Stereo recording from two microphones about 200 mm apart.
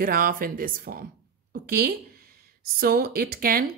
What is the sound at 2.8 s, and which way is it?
Speech, 50° right (ahead or behind).